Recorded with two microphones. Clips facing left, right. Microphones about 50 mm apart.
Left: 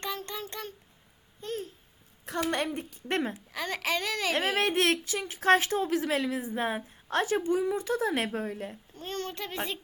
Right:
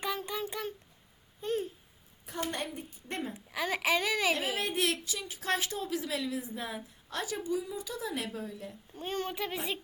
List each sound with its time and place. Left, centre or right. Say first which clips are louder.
0.0 s child singing: right 1 dB; centre
1.4 s babbling: right 3 dB; centre
2.2 s a woman's voice: left 6 dB; left
3.5 s a child's voice: right 4 dB; centre
4.4 s a woman's voice: left 5 dB; left
8.9 s a child's voice: right 3 dB; centre